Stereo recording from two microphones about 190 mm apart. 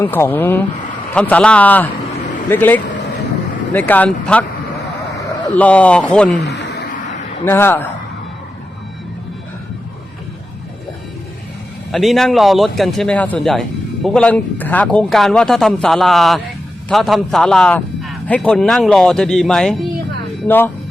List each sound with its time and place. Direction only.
0.0 s a man's voice: 10° left (ahead or behind)
5.5 s a man's voice: 5° left (ahead or behind)
6.4 s a sound: 60° left (ahead or behind)
7.4 s a man's voice: 10° left (ahead or behind)
11.9 s a man's voice: centre (ahead or behind)